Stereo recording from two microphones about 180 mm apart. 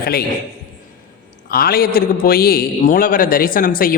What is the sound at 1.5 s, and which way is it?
A man's voice, 55° left (ahead or behind).